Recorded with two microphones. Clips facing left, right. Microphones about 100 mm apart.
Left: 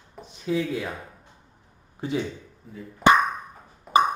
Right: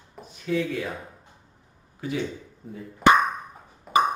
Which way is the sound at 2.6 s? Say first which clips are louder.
Right 4 dB; 55° right (ahead or behind).